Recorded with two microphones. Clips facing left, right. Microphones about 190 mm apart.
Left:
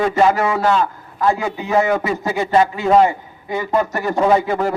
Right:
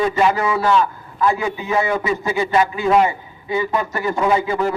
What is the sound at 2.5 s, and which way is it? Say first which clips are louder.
A man's voice: left 3 dB; 35° left (ahead or behind).